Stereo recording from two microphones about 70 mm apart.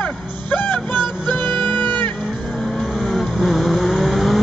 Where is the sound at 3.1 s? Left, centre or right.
Centre.